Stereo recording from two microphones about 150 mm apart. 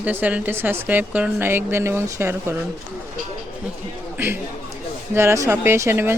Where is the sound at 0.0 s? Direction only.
10° right (ahead or behind).